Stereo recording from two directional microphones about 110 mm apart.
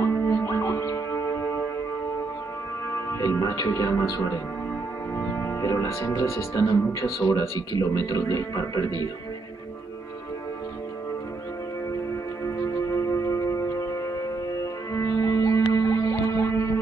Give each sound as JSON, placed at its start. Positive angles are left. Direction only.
{"t": 0.0, "sound": "music", "side_deg": 25}
{"t": 3.1, "sound": "speech", "side_deg": 30}
{"t": 12.8, "sound": "music", "side_deg": 25}